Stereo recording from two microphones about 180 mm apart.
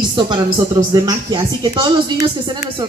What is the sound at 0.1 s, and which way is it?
A woman's voice, 25° right (ahead or behind).